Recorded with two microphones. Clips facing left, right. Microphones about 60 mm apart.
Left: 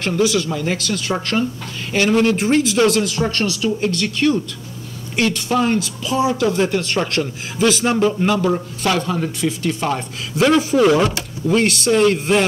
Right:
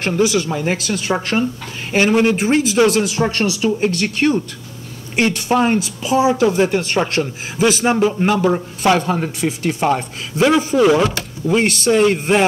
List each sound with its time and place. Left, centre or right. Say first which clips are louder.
0.2 s speech: right 1 dB; centre
0.5 s speech: right 2 dB; right; by 3.1 s centre
3.1 s speech: right 2 dB; right
8.2 s speech: right 2 dB; right
9.4 s speech: right 2 dB; centre
10.3 s a man's voice: even; centre
12.3 s speech: right 1 dB; centre